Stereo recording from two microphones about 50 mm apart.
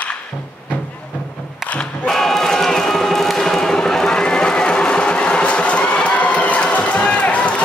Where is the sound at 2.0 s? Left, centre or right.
Centre; by 5.8 s left.